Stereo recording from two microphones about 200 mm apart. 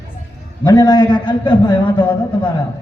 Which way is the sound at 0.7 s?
20° left (ahead or behind).